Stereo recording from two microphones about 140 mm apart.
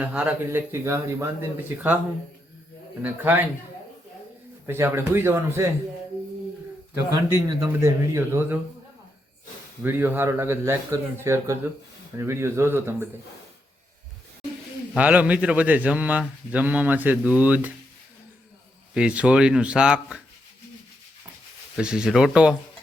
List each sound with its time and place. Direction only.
0.0 s speech: 10° right (ahead or behind)
0.5 s a man's voice: 20° right (ahead or behind)
3.0 s speech: 15° right (ahead or behind)
4.6 s speech: 20° right (ahead or behind)
7.1 s a man's voice: 25° right (ahead or behind)
9.8 s speech: 15° right (ahead or behind)
14.9 s speech: 10° right (ahead or behind)
18.9 s speech: 10° right (ahead or behind)
21.8 s speech: 5° right (ahead or behind)